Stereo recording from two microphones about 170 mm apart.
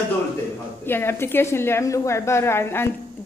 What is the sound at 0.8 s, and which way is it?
A woman's voice, 15° left (ahead or behind).